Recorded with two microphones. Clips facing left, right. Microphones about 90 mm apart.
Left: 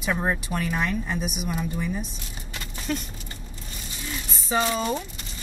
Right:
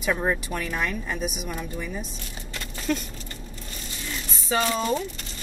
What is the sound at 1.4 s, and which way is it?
Speech, 15° left (ahead or behind).